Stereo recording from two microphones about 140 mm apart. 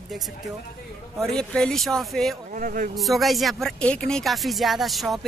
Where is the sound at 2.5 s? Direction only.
75° right (ahead or behind).